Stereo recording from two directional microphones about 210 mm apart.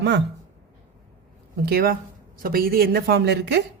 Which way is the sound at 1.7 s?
45° right (ahead or behind).